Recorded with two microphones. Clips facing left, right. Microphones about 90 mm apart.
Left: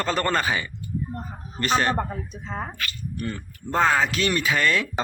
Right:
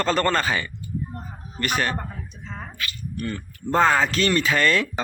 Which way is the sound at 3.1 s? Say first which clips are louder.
Right 2 dB; 20° left (ahead or behind).